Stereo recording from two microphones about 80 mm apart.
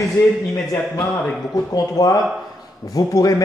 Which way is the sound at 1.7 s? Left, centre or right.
Left.